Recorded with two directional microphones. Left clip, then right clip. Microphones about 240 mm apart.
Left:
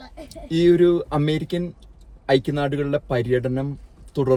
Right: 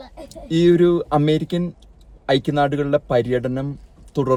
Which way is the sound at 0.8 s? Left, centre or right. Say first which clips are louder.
Right 2 dB; centre.